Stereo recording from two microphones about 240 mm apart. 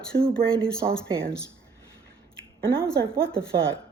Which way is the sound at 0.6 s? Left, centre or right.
Right.